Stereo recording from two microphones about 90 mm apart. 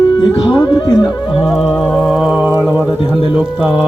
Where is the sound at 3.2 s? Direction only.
15° right (ahead or behind).